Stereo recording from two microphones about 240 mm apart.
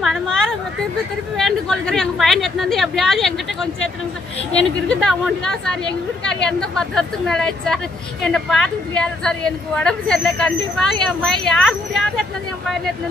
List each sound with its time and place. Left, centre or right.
0.0 s a sound: centre
1.3 s speech: centre
4.8 s speech: centre